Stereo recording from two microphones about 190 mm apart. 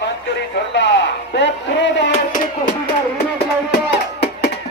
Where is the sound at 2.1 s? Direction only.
45° left (ahead or behind).